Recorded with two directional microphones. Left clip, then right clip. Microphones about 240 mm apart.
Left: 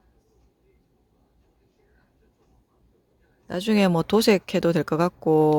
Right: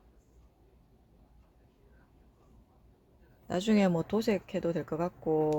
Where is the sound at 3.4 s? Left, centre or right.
Centre; by 5.5 s left.